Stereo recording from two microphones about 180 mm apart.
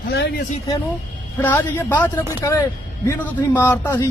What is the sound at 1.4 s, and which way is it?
A man's voice, 10° left (ahead or behind).